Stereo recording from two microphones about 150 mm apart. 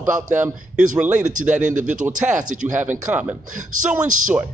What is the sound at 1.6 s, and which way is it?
Speech, 55° right (ahead or behind).